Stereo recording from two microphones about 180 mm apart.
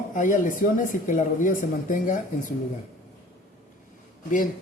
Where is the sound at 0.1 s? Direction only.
45° left (ahead or behind).